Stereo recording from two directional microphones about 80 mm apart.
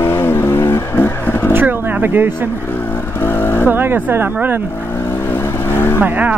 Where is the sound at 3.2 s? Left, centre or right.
Left.